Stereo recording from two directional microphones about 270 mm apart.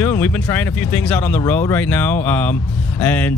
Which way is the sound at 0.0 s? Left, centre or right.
Centre.